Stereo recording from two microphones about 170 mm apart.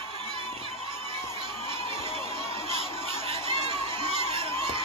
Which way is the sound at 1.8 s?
35° left (ahead or behind).